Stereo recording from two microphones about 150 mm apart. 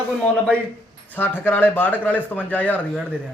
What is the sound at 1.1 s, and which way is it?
A man's voice, 15° left (ahead or behind).